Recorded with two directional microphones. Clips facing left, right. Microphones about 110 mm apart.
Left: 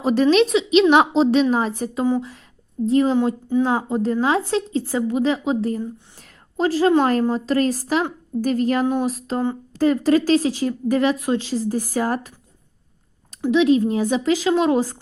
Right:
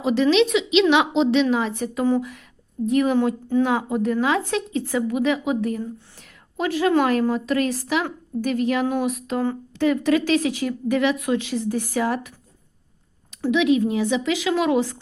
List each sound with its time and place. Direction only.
0.0 s speech: 45° left (ahead or behind)
3.2 s speech: 15° left (ahead or behind)
3.6 s speech: 30° left (ahead or behind)
6.2 s a sound: 35° left (ahead or behind)
7.0 s speech: 40° left (ahead or behind)
13.5 s speech: 35° left (ahead or behind)